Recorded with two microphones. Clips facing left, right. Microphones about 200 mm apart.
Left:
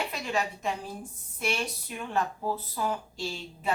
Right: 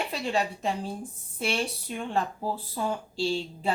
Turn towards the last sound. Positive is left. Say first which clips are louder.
# right 4 dB
turn(degrees=-30)  # may be behind; listen again after turning